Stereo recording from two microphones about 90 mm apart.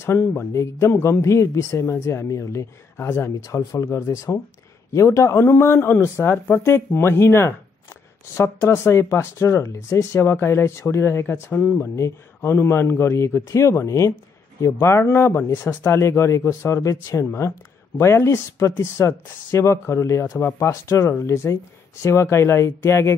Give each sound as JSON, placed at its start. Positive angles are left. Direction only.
{"t": 0.0, "sound": "speech", "side_deg": 30}